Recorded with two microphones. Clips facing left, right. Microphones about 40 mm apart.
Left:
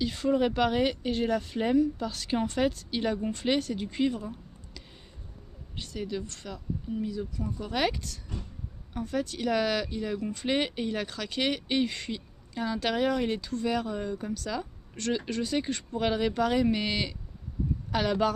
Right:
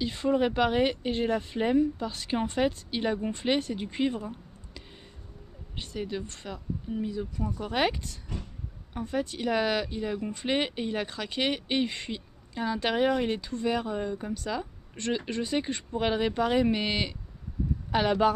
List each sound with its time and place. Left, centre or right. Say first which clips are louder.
0.0 s speech: even; centre